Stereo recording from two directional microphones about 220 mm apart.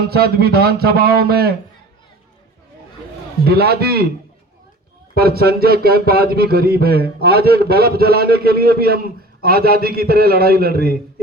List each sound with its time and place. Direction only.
0.1 s speech: 45° right (ahead or behind)
3.4 s speech: 45° right (ahead or behind)
5.1 s speech: 45° right (ahead or behind)